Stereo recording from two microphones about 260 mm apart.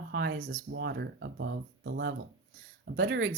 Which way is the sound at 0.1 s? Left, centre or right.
Right.